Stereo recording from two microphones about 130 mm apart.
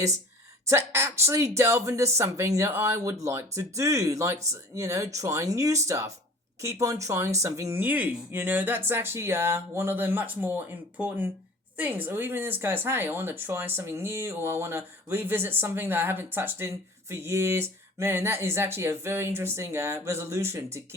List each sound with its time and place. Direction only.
0.6 s speech: 20° right (ahead or behind)